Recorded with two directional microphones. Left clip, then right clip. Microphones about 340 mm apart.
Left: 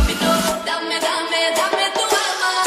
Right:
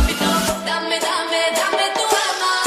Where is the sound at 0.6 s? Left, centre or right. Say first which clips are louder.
Even; centre.